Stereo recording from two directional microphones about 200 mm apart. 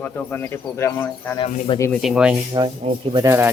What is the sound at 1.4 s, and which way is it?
Speech, 25° left (ahead or behind).